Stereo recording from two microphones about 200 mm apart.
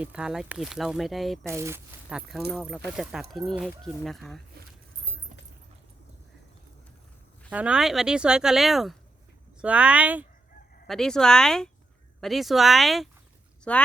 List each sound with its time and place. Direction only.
0.0 s speech: 5° right (ahead or behind)
1.5 s speech: 15° right (ahead or behind)
4.6 s speech: 50° right (ahead or behind)
7.5 s speech: 5° right (ahead or behind)